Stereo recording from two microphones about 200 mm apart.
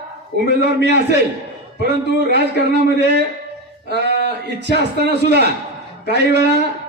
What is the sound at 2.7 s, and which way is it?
A man's voice, 55° right (ahead or behind).